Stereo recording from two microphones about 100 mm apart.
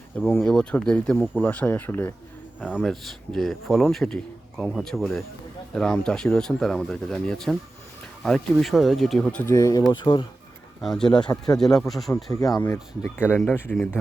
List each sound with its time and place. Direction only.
0.2 s speech: 10° left (ahead or behind)
2.6 s a man's voice: 10° right (ahead or behind); by 9.5 s 10° left (ahead or behind)
9.5 s speech: 40° left (ahead or behind)
9.9 s speech: 50° left (ahead or behind)
10.8 s speech: centre (ahead or behind)
12.3 s speech: 35° left (ahead or behind)
12.6 s speech: 25° left (ahead or behind)
13.4 s speech: 15° left (ahead or behind)